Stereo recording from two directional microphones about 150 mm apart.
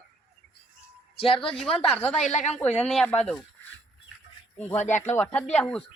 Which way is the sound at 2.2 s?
50° left (ahead or behind).